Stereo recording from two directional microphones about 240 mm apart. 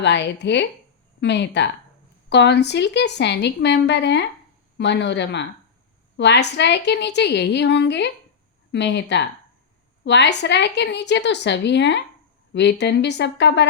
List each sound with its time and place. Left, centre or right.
0.0 s a woman's voice: left